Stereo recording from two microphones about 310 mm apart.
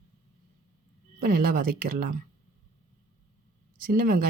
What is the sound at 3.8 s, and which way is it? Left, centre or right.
Speech, right.